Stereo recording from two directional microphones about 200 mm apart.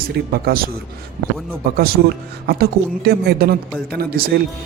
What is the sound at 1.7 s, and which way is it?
Speech, 50° right (ahead or behind).